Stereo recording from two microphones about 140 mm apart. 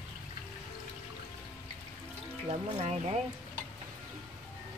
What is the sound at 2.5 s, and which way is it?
Speech, 45° right (ahead or behind).